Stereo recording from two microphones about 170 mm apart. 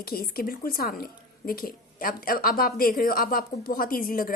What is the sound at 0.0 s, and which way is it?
A woman's voice, 60° left (ahead or behind).